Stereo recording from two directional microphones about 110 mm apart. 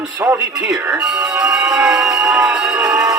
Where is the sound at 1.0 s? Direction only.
5° right (ahead or behind).